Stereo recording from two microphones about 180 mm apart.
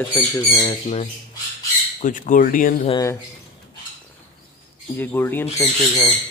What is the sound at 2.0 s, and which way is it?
Speech, 45° left (ahead or behind).